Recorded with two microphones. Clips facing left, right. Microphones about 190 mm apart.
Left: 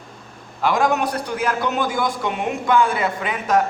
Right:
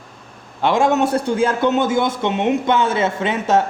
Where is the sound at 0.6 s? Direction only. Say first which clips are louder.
Right 3 dB; 25° right (ahead or behind).